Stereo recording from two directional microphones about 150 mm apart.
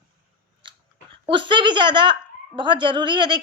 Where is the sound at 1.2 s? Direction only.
35° right (ahead or behind).